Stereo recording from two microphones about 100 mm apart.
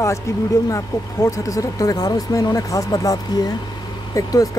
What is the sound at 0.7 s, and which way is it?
Speech, 30° left (ahead or behind).